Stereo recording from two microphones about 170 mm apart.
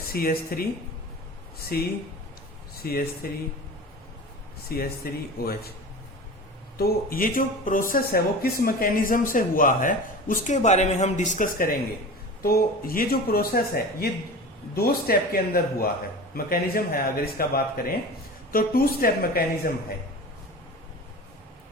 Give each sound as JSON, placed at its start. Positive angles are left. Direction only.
{"t": 0.1, "sound": "speech", "side_deg": 60}
{"t": 1.7, "sound": "speech", "side_deg": 65}
{"t": 4.7, "sound": "speech", "side_deg": 60}
{"t": 6.7, "sound": "speech", "side_deg": 60}